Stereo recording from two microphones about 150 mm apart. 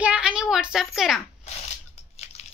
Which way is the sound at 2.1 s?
45° left (ahead or behind).